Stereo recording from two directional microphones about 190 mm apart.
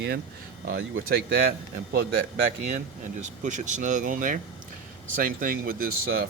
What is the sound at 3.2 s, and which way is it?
Speech, 40° right (ahead or behind).